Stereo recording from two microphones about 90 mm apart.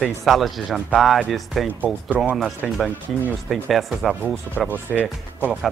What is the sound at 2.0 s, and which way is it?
Speech, 15° right (ahead or behind).